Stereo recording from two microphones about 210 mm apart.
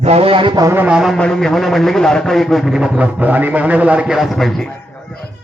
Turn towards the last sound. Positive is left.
turn(degrees=0)  # may be behind; listen again after turning